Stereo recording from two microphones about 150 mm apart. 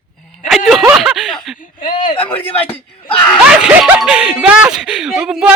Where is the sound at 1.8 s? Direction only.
55° left (ahead or behind).